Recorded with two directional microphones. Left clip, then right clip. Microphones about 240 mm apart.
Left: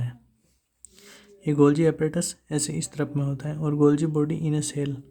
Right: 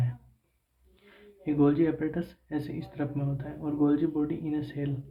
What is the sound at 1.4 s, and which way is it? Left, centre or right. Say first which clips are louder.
Speech: left 5 dB; left.